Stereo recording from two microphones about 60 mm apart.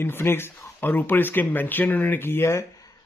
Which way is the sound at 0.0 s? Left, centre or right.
Left.